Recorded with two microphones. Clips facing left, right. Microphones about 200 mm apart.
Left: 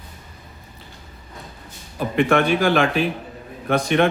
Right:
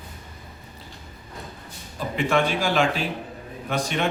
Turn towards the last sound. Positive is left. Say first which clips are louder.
# left 8 dB
turn(degrees=60)  # may be behind; listen again after turning